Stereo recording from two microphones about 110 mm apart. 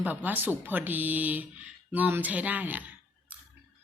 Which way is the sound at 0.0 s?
15° right (ahead or behind).